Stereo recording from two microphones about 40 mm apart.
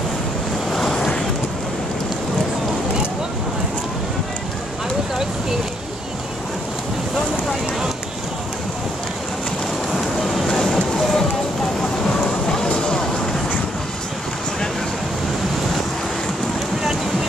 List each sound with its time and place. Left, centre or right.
0.7 s vehicle: centre
9.9 s a sound: centre
12.1 s music: centre